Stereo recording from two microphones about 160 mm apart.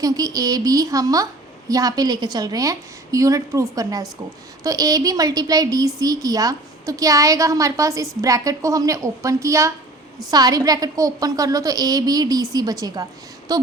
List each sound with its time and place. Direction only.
0.0 s a woman's voice: 25° right (ahead or behind)